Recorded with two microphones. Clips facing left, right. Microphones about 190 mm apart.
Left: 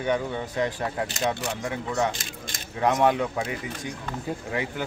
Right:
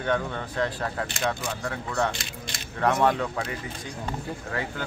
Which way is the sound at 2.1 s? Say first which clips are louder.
Left 1 dB; 45° left (ahead or behind).